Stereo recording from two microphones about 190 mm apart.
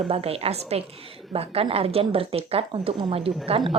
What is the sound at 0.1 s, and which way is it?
Speech, 30° right (ahead or behind).